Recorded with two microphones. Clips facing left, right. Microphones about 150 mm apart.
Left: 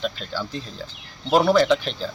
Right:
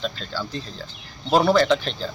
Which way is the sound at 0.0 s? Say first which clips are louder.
Left 1 dB; 10° left (ahead or behind).